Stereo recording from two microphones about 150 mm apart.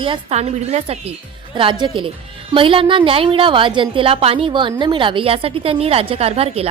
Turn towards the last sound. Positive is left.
turn(degrees=-40)  # may be behind; listen again after turning